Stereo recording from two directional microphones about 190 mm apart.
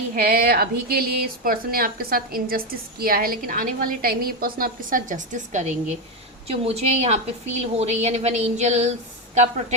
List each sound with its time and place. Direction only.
0.2 s speech: 55° right (ahead or behind); by 9.7 s 35° right (ahead or behind)